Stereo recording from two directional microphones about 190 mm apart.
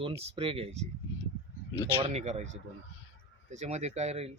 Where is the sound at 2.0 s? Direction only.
35° right (ahead or behind).